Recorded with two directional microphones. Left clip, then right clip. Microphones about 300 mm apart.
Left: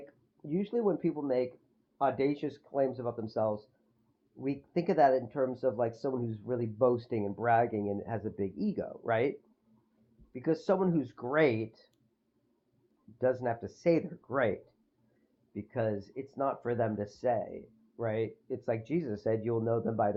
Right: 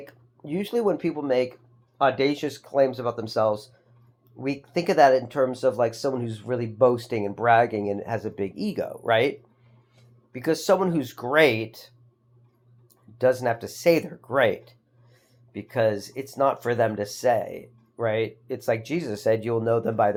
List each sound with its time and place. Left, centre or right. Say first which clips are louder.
0.0 s speech: right 7 dB; centre
10.3 s speech: right 8 dB; centre
13.1 s speech: right 9 dB; centre